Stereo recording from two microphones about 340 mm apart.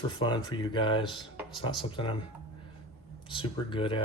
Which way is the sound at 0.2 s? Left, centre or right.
Centre.